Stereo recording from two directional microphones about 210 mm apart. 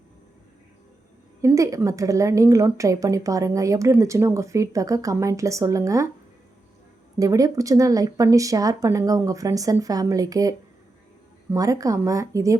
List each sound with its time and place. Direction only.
1.4 s a woman's voice: 15° right (ahead or behind)
7.2 s a woman's voice: 15° right (ahead or behind)
11.5 s a woman's voice: 15° right (ahead or behind)